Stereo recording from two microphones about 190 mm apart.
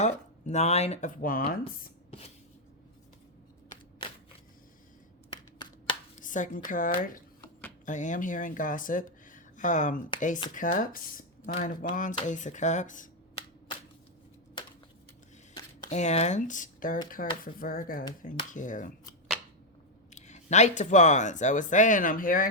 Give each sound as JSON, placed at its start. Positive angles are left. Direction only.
{"t": 0.0, "sound": "speech", "side_deg": 35}
{"t": 2.0, "sound": "a sound", "side_deg": 30}
{"t": 6.1, "sound": "speech", "side_deg": 45}
{"t": 15.9, "sound": "speech", "side_deg": 35}
{"t": 20.1, "sound": "speech", "side_deg": 40}